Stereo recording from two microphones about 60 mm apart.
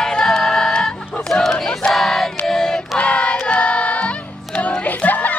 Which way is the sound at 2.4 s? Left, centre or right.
Centre.